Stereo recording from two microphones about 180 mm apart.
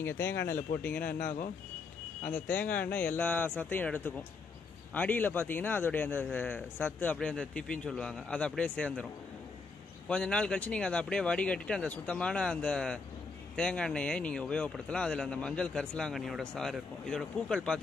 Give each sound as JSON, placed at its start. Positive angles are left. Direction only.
{"t": 0.0, "sound": "a man's voice", "side_deg": 15}
{"t": 0.4, "sound": "speech", "side_deg": 55}
{"t": 2.2, "sound": "a man's voice", "side_deg": 10}
{"t": 10.0, "sound": "speech", "side_deg": 5}